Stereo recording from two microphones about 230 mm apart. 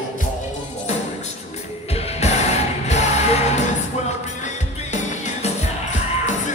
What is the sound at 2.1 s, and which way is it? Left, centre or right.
Music, left.